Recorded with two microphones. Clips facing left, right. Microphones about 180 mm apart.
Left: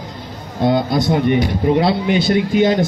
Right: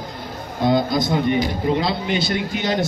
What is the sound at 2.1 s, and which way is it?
Speech, 55° left (ahead or behind).